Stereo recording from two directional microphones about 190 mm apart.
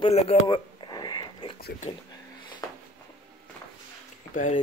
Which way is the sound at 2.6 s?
20° left (ahead or behind).